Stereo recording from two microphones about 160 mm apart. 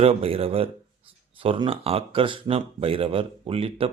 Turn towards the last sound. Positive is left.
turn(degrees=-35)  # may be behind; listen again after turning